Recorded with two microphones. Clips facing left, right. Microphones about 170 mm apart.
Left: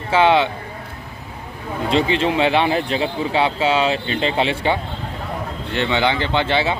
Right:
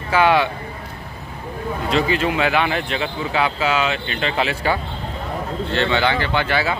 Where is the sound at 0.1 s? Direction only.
25° left (ahead or behind).